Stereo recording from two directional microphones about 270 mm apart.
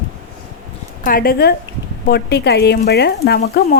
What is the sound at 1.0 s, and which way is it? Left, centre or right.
Speech, left.